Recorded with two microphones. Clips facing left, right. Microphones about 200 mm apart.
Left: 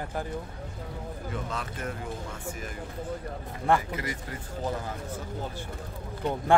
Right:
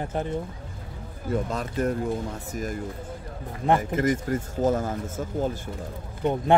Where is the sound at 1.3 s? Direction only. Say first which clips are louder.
Right 10 dB; 40° right (ahead or behind).